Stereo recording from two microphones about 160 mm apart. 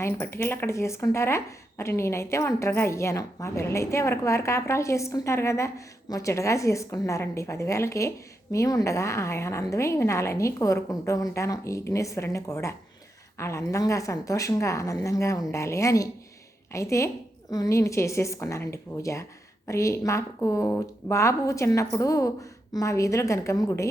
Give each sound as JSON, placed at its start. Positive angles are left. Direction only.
{"t": 0.0, "sound": "a woman's voice", "side_deg": 15}